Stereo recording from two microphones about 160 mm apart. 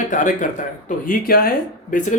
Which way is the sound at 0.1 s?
50° left (ahead or behind).